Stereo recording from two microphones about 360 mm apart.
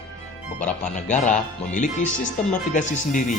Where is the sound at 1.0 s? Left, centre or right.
Centre.